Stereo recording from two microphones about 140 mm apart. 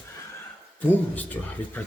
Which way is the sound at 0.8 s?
10° left (ahead or behind).